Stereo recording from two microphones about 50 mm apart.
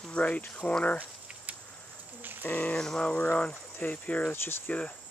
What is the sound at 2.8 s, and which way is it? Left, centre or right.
Speech, centre.